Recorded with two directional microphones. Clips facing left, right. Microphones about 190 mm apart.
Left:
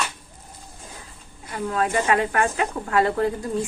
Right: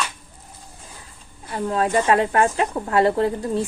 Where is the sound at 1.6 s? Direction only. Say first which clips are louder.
Right 3 dB; 30° right (ahead or behind).